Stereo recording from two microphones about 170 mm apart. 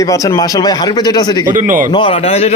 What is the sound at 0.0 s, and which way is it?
Speech, 20° left (ahead or behind).